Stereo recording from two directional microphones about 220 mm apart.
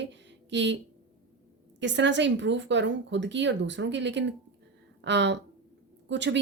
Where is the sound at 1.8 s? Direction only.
55° right (ahead or behind).